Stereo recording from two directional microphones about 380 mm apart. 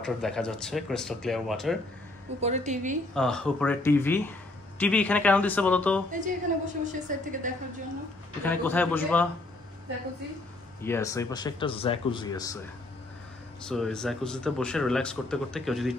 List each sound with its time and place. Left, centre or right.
0.0 s speech: centre
2.4 s a woman's voice: centre
3.2 s speech: centre
6.1 s a woman's voice: centre
8.5 s speech: centre
10.8 s speech: centre
13.6 s speech: centre